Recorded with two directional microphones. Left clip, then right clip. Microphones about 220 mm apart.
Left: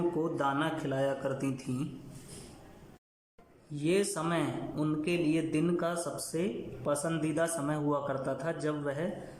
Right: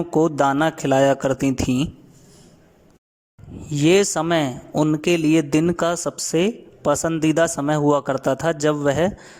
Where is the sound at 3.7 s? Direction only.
45° right (ahead or behind).